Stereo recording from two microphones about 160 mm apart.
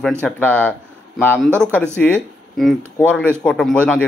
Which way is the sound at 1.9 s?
5° left (ahead or behind).